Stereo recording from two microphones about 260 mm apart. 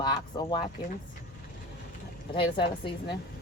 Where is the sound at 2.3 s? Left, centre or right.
Centre.